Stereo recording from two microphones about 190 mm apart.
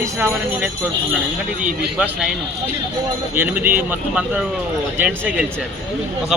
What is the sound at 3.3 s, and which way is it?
Speech, 10° right (ahead or behind).